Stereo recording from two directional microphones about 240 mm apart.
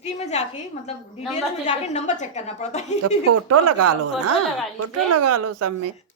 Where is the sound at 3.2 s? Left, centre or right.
Right.